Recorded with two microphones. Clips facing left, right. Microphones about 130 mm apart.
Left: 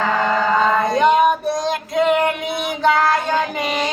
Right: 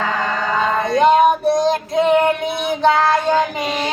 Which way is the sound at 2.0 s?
25° right (ahead or behind).